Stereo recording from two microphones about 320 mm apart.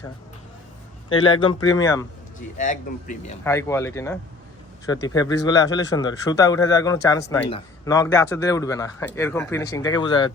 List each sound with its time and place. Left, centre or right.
1.1 s speech: centre
2.6 s a man's voice: left
3.4 s speech: centre